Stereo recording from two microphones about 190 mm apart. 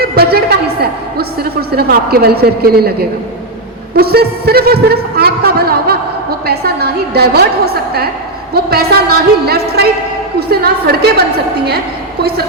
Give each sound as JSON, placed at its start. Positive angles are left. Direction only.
{"t": 0.0, "sound": "a woman's voice", "side_deg": -55}